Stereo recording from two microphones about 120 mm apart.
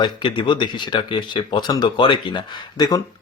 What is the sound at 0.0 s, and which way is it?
Speech, 40° left (ahead or behind).